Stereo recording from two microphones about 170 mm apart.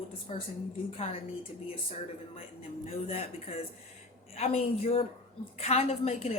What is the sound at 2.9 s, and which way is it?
A woman's voice, 35° left (ahead or behind).